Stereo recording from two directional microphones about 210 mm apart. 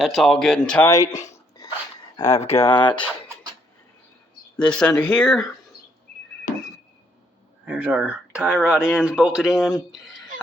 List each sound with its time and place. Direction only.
0.0 s speech: centre (ahead or behind); by 3.1 s 25° left (ahead or behind)
4.5 s speech: 5° left (ahead or behind)
7.6 s speech: 5° right (ahead or behind)